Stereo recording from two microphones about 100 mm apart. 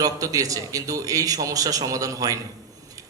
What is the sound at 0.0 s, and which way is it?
Speech, 35° right (ahead or behind).